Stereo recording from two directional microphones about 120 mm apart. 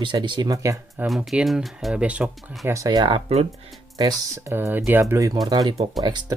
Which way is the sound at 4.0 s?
30° right (ahead or behind).